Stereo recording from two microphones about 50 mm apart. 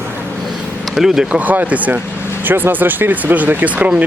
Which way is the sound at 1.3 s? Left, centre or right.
Right.